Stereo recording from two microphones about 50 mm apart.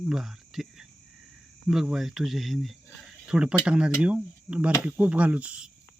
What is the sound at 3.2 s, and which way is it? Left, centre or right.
Speech, centre.